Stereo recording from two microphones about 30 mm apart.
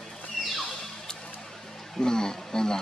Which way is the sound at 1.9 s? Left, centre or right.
Left.